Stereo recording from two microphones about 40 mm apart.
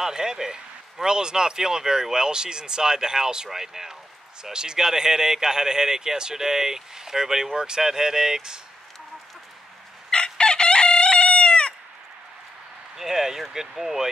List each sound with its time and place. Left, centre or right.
0.0 s speech: centre
10.1 s chicken: left
12.9 s speech: centre